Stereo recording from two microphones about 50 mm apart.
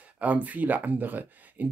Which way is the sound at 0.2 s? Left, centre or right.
Right.